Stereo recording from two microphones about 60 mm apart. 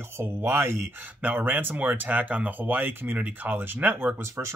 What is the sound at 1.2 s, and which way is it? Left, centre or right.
Speech, right.